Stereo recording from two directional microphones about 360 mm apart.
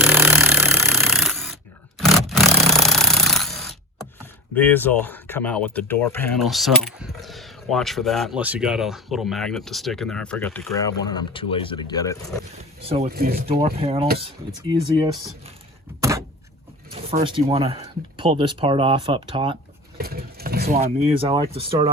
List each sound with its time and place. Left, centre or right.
0.0 s a sound: centre
2.0 s roar: centre
4.5 s speech: centre
12.8 s speech: centre
16.0 s door: centre
16.9 s speech: centre
20.0 s speech: right